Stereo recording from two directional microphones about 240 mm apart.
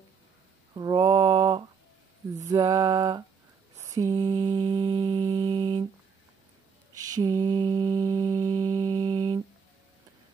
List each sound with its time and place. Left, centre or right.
0.7 s mantra: centre
2.3 s a sound: centre
3.7 s mantra: centre
7.0 s mantra: centre